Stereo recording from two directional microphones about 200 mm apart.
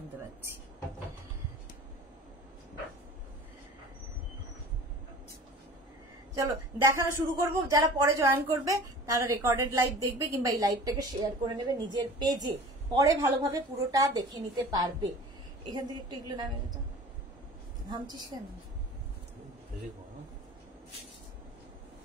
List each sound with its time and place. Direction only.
6.3 s a woman's voice: 15° right (ahead or behind)
17.8 s a woman's voice: 20° right (ahead or behind)